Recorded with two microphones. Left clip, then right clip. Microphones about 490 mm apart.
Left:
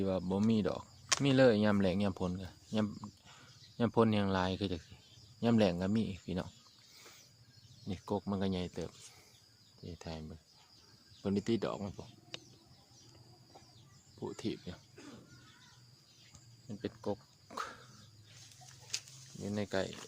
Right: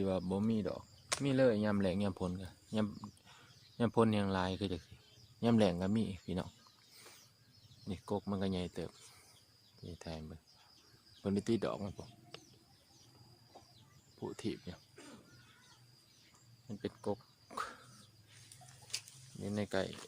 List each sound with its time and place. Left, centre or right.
0.0 s speech: left
7.9 s speech: left
10.0 s speech: left
14.2 s speech: left
16.6 s a sound: left
18.9 s a sound: left